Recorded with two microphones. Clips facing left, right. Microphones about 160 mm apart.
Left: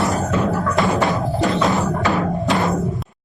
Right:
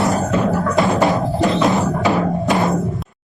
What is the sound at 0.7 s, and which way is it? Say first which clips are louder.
Music: right 4 dB; centre (ahead or behind).